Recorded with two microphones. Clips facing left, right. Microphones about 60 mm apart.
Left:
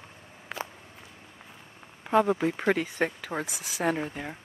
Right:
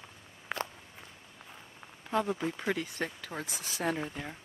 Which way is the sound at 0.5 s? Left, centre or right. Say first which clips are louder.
Even; centre.